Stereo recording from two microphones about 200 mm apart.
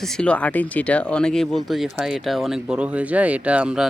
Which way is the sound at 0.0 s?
5° left (ahead or behind).